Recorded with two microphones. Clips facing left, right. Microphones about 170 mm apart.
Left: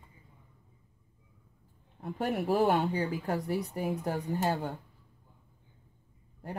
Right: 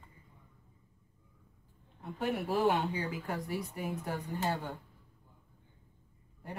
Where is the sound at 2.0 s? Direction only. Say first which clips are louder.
Left 3 dB; 40° left (ahead or behind).